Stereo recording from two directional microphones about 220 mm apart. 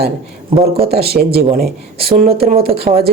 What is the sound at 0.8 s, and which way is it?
Speech, 45° right (ahead or behind).